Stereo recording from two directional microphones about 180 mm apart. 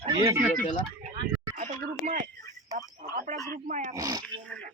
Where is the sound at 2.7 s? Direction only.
45° right (ahead or behind).